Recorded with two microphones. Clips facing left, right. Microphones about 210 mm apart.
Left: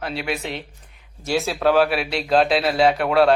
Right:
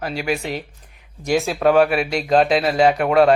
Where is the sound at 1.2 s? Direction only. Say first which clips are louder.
Right 3 dB; 15° right (ahead or behind).